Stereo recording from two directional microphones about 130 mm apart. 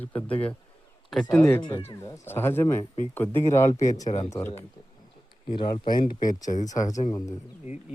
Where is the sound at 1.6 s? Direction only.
35° left (ahead or behind).